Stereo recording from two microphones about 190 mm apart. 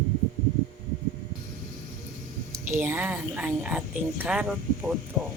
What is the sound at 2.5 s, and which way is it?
A woman's voice, 10° right (ahead or behind).